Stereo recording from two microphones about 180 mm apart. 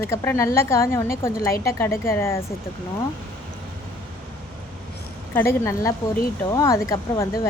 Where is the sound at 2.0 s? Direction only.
15° left (ahead or behind).